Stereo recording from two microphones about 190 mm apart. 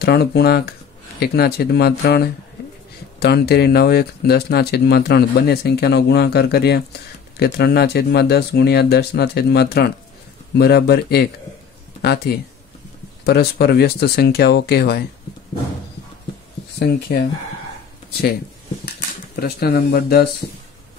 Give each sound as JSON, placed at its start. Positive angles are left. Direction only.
{"t": 0.0, "sound": "speech", "side_deg": 55}
{"t": 17.1, "sound": "speech", "side_deg": 55}
{"t": 18.9, "sound": "speech", "side_deg": 55}